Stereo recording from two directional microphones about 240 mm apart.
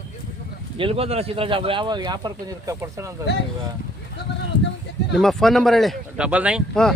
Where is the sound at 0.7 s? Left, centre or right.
Right.